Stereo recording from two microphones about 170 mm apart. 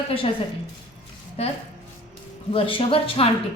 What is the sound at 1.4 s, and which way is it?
Speech, 35° left (ahead or behind).